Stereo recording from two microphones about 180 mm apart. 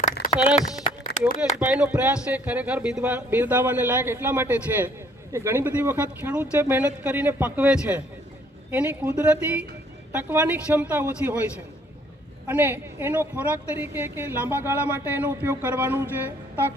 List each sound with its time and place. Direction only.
0.0 s a sound: 50° left (ahead or behind)
1.5 s a woman's voice: 5° right (ahead or behind)
12.5 s a woman's voice: 10° right (ahead or behind)